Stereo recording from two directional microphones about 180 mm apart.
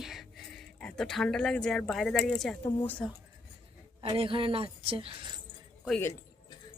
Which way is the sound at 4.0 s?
30° right (ahead or behind).